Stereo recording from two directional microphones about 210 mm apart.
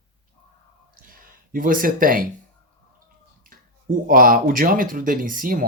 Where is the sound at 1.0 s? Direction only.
40° right (ahead or behind).